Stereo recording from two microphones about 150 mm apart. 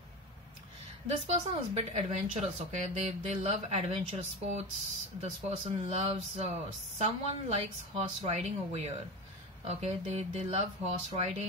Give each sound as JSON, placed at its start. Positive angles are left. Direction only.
{"t": 1.0, "sound": "speech", "side_deg": -45}